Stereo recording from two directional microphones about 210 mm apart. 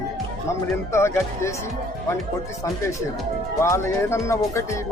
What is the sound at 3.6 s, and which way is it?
Speech, 15° left (ahead or behind).